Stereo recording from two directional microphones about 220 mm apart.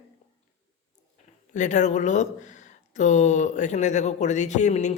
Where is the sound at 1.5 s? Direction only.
35° left (ahead or behind).